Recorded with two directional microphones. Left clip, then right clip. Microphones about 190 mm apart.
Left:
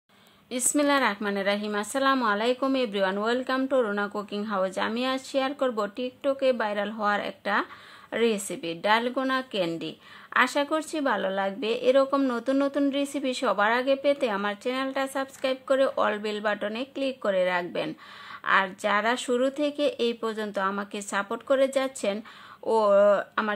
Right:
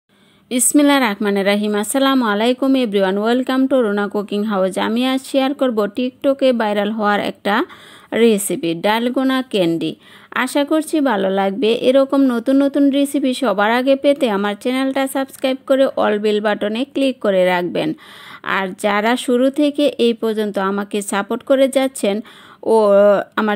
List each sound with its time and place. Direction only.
0.5 s a woman's voice: 40° right (ahead or behind)